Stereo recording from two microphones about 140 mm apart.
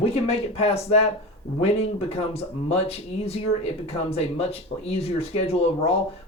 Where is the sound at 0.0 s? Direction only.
45° left (ahead or behind).